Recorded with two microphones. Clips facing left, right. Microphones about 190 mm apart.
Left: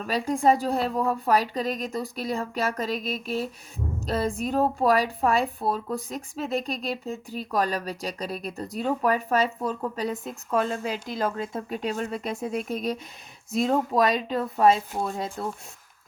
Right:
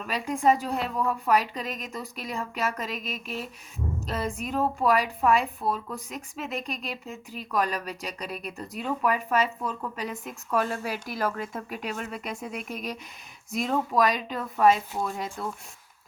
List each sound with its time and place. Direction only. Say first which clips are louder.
0.0 s a woman's voice: left 2 dB; 35° left (ahead or behind)